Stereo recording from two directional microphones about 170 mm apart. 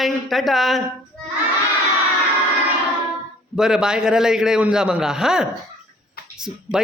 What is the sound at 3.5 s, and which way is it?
Speech, 5° right (ahead or behind).